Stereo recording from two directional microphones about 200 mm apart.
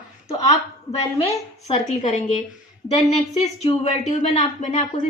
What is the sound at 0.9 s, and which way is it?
A woman's voice, 30° left (ahead or behind).